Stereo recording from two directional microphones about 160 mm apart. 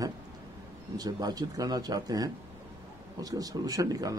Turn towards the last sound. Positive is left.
turn(degrees=-20)  # may be behind; listen again after turning